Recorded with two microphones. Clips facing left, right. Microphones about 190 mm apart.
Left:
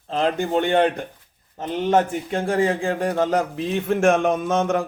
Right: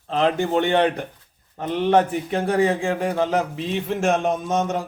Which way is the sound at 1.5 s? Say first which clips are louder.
Right 1 dB; 30° left (ahead or behind).